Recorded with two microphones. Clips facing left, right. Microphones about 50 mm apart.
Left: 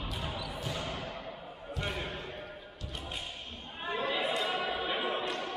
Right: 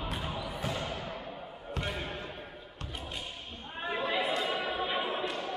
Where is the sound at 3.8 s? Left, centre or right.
Centre.